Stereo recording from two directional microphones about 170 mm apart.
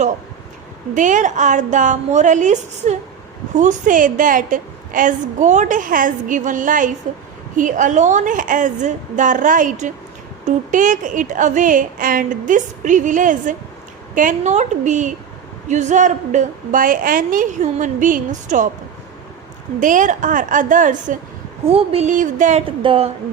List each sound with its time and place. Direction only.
0.9 s a woman's voice: 50° right (ahead or behind)
19.8 s a woman's voice: 50° right (ahead or behind)
21.7 s a woman's voice: 35° right (ahead or behind)
22.6 s speech: 30° right (ahead or behind)